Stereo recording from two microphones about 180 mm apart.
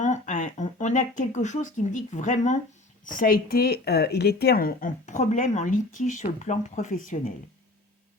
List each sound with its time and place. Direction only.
0.0 s speech: 45° left (ahead or behind)